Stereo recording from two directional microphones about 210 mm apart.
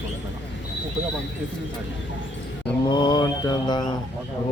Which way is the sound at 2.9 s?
20° left (ahead or behind).